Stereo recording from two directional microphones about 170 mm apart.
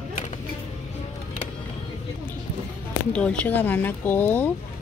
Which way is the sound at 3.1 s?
5° left (ahead or behind).